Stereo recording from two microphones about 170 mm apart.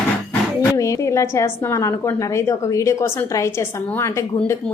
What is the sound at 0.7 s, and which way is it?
A woman's voice, 20° left (ahead or behind).